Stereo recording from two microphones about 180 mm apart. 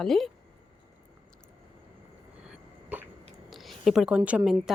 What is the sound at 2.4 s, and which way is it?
Cough, 5° right (ahead or behind).